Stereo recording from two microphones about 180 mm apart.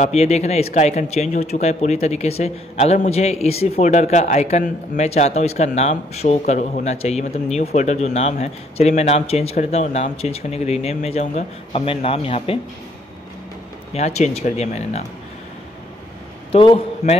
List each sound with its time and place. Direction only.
0.0 s speech: 35° left (ahead or behind)
13.9 s speech: 40° left (ahead or behind)
16.5 s speech: 30° left (ahead or behind)